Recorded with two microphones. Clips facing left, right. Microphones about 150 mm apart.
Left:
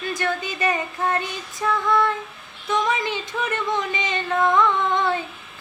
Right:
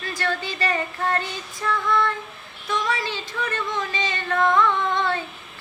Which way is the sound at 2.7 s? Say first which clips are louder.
Left 3 dB; 20° left (ahead or behind).